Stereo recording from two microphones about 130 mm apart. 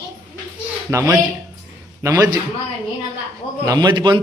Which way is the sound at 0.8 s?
25° right (ahead or behind).